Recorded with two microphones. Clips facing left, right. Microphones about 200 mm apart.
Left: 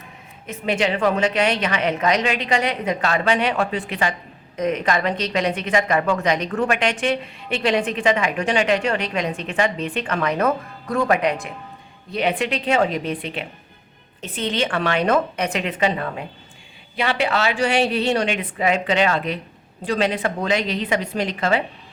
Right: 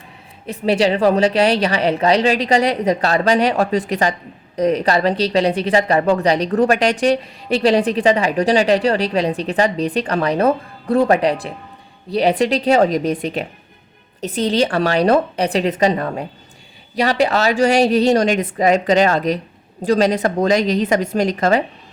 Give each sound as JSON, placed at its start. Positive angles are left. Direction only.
{"t": 0.4, "sound": "a woman's voice", "side_deg": -35}